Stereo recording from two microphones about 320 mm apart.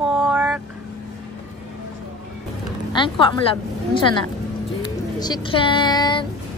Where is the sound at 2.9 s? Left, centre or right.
Centre.